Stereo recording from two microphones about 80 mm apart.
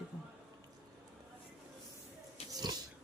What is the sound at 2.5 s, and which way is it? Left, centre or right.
Pig, right.